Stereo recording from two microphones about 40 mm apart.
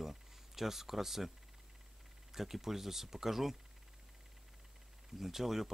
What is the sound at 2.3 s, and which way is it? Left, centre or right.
Speech, centre.